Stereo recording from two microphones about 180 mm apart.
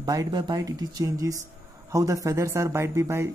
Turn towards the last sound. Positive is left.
turn(degrees=-15)  # may be behind; listen again after turning